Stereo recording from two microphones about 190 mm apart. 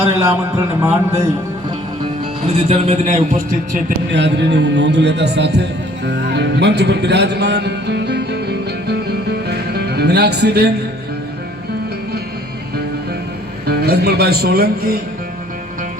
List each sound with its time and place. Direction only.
0.2 s a man's voice: 10° right (ahead or behind)
2.6 s a man's voice: 35° right (ahead or behind)
3.8 s speech: 65° right (ahead or behind)
9.5 s music: 60° right (ahead or behind)
13.7 s speech: 55° right (ahead or behind)